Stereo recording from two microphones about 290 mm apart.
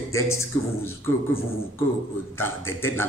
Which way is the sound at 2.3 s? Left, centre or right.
Centre.